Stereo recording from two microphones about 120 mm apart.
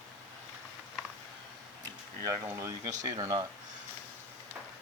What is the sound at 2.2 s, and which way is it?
Speech, 25° right (ahead or behind).